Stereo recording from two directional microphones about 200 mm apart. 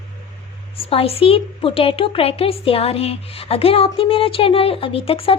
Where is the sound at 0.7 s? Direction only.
30° left (ahead or behind).